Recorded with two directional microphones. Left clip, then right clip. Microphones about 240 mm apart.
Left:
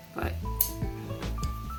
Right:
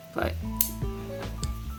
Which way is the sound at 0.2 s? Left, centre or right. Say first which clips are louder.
Right 5 dB; right.